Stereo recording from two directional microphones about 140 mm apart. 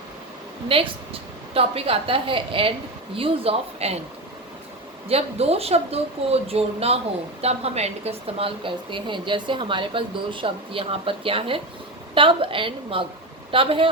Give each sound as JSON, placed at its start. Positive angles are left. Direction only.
{"t": 0.7, "sound": "a woman's voice", "side_deg": -40}
{"t": 5.0, "sound": "a woman's voice", "side_deg": -45}